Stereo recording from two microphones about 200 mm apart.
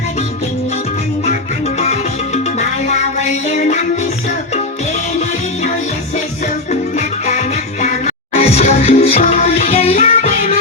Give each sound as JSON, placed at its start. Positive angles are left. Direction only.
{"t": 1.2, "sound": "music", "side_deg": 35}
{"t": 6.7, "sound": "music", "side_deg": 35}